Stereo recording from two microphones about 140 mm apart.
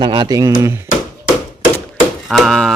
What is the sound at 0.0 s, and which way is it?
Speech, 35° right (ahead or behind).